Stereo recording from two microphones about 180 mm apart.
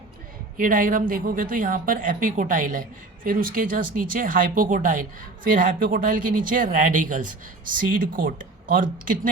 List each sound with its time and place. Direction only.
0.5 s speech: 50° right (ahead or behind)